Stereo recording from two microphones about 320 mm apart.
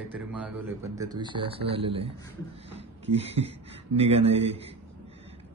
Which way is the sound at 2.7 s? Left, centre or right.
Centre.